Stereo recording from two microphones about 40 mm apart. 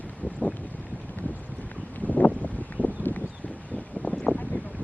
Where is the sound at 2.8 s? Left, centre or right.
Left.